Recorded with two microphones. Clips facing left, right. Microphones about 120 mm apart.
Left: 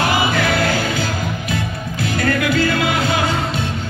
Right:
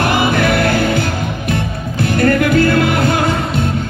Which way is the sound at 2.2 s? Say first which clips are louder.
Right 6 dB; 50° right (ahead or behind).